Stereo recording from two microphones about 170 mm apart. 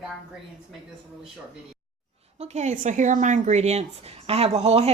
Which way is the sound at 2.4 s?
40° right (ahead or behind).